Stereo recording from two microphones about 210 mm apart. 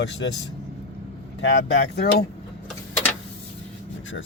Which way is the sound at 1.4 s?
50° left (ahead or behind).